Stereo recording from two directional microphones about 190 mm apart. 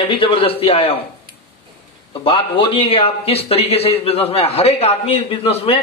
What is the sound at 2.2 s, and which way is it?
A man's voice, 30° left (ahead or behind).